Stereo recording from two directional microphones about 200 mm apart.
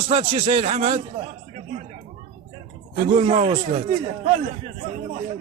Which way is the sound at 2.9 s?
30° right (ahead or behind).